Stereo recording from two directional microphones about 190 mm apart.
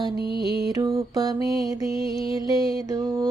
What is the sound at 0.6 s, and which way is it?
Mantra, 20° right (ahead or behind).